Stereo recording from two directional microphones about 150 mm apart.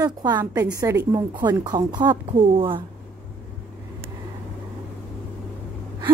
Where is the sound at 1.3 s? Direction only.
30° right (ahead or behind).